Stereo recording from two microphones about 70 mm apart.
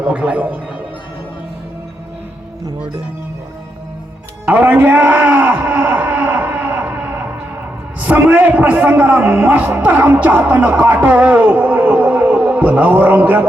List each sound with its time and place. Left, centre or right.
0.0 s a man's voice: centre
4.4 s a man's voice: right